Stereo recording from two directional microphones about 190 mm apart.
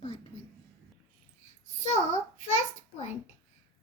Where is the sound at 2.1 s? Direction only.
40° left (ahead or behind).